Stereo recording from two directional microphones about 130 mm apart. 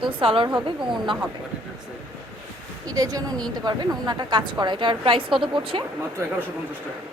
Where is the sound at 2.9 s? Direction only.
30° right (ahead or behind).